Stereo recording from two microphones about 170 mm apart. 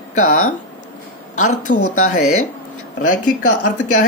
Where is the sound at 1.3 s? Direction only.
50° left (ahead or behind).